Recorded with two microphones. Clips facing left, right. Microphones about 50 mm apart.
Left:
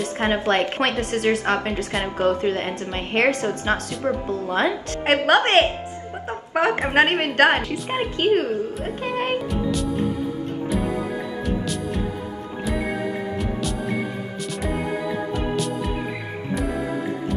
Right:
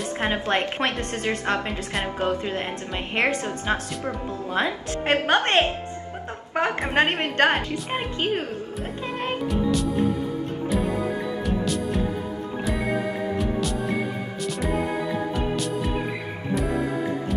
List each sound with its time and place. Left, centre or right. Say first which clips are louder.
0.0 s a woman's voice: left 3 dB; centre
9.0 s speech: left 5 dB; left
12.7 s music: left 1 dB; centre
14.7 s music: left 1 dB; centre